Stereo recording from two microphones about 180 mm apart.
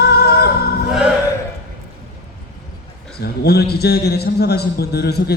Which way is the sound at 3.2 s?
60° left (ahead or behind).